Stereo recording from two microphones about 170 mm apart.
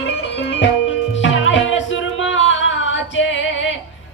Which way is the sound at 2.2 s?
90° left.